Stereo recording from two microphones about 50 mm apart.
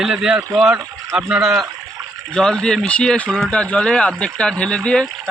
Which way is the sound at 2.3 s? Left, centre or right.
Centre.